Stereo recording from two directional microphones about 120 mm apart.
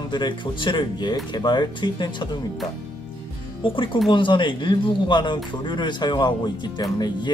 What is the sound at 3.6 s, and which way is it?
Speech, 45° left (ahead or behind).